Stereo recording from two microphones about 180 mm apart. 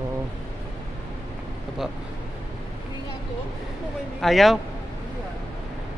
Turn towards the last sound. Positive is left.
turn(degrees=0)  # may be behind; listen again after turning